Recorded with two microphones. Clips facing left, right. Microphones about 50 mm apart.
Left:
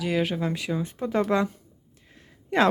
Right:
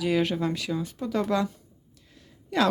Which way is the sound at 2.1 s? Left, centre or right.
Left.